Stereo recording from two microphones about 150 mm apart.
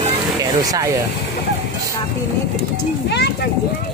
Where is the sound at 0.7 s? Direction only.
20° right (ahead or behind).